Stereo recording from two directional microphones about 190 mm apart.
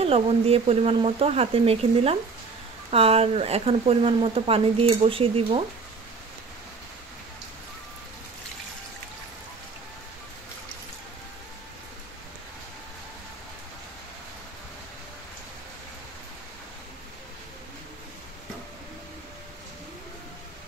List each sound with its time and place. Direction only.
0.0 s speech: 30° right (ahead or behind)